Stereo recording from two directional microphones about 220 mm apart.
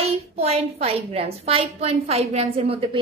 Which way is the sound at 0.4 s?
30° right (ahead or behind).